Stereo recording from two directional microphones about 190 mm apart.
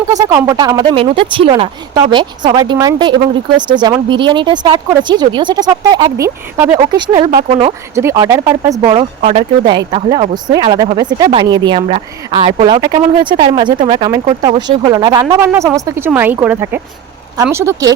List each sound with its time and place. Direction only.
0.1 s speech: 20° right (ahead or behind)
11.8 s speech: 35° right (ahead or behind); by 17.9 s 15° right (ahead or behind)